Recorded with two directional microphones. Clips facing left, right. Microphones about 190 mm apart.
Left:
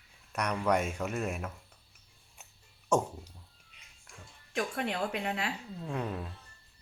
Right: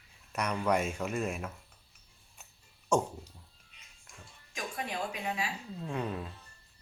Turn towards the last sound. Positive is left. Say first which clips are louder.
# even
turn(degrees=0)  # may be behind; listen again after turning